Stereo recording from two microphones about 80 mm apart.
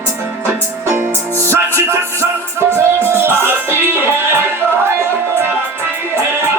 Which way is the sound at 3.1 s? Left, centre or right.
Right.